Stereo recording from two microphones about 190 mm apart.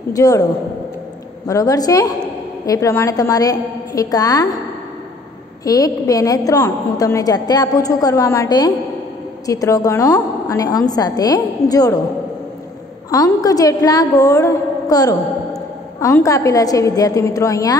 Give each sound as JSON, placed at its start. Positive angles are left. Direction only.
{"t": 0.1, "sound": "a woman's voice", "side_deg": 20}
{"t": 1.5, "sound": "a woman's voice", "side_deg": 20}
{"t": 5.6, "sound": "a woman's voice", "side_deg": 20}
{"t": 13.1, "sound": "a woman's voice", "side_deg": 20}